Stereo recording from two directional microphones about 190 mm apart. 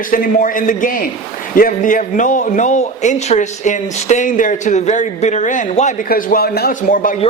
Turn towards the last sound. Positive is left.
turn(degrees=45)  # may be behind; listen again after turning